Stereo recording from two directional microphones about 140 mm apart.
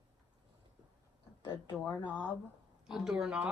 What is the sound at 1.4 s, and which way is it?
Speech, 35° left (ahead or behind).